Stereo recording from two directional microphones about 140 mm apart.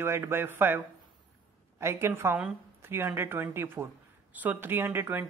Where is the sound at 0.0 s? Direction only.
15° right (ahead or behind).